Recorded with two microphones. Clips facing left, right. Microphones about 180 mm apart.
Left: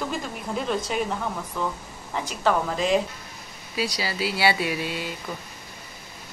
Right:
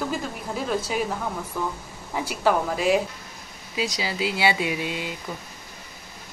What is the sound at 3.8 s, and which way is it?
Speech, 20° right (ahead or behind).